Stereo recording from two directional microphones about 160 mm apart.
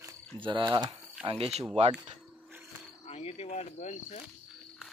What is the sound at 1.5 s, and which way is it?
Speech, centre (ahead or behind).